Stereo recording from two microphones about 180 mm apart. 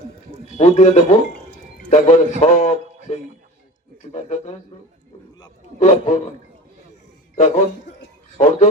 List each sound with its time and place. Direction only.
0.5 s a man's voice: 40° left (ahead or behind)
5.8 s a man's voice: 45° left (ahead or behind)
7.3 s a man's voice: 45° left (ahead or behind)